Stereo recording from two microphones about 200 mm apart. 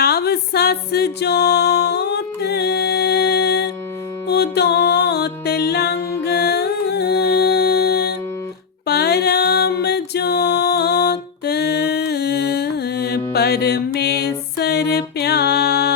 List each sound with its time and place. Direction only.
0.0 s music: 50° left (ahead or behind)